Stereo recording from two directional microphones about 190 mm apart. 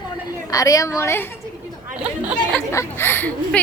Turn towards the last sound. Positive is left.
turn(degrees=10)  # may be behind; listen again after turning